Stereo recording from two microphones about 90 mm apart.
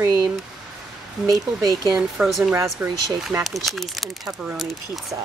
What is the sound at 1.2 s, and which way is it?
Speech, 45° right (ahead or behind).